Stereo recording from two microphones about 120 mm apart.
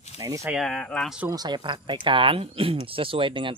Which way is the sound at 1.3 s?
35° right (ahead or behind).